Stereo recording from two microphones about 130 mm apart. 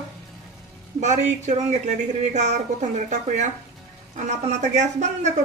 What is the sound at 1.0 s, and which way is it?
A woman's voice, 65° right (ahead or behind).